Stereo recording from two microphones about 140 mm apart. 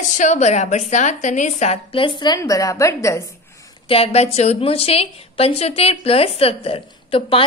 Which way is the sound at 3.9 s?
45° left (ahead or behind).